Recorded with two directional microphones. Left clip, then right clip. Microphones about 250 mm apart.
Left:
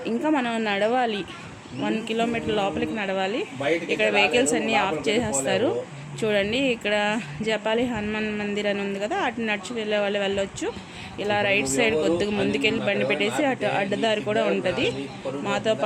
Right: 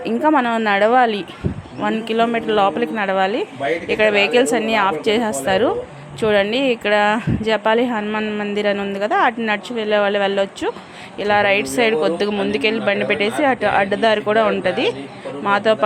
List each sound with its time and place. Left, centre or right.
0.0 s speech: centre